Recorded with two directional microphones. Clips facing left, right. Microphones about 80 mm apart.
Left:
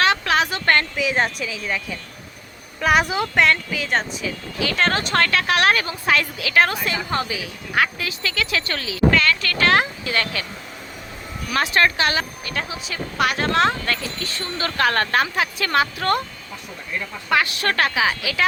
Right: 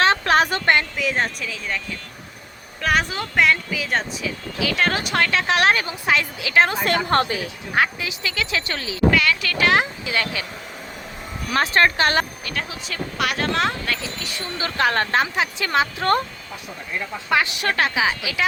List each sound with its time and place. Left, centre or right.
0.0 s a sound: right
0.6 s speech: centre
0.9 s speech: centre
2.8 s speech: centre
3.3 s speech: centre; by 6.8 s right
6.8 s a woman's voice: right
7.8 s speech: centre
9.1 s speech: centre
11.5 s speech: right
12.5 s speech: centre; by 16.0 s right
17.2 s speech: right